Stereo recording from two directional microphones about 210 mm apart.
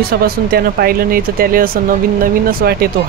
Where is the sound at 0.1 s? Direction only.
50° right (ahead or behind).